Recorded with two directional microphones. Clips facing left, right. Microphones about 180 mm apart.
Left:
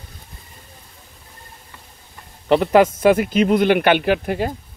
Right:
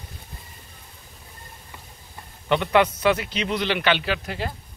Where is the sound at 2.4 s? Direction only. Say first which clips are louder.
Left 6 dB; 35° left (ahead or behind).